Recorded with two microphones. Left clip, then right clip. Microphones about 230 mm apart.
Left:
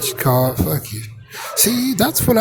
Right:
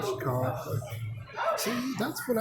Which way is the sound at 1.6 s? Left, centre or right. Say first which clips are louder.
Left 14 dB; left.